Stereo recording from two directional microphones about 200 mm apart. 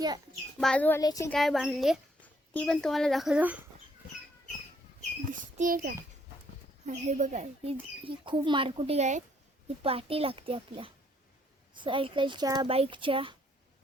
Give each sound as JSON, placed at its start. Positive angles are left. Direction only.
{"t": 0.6, "sound": "a child's voice", "side_deg": 5}
{"t": 1.3, "sound": "speech", "side_deg": 0}
{"t": 5.3, "sound": "a sound", "side_deg": -40}
{"t": 6.8, "sound": "speech", "side_deg": -35}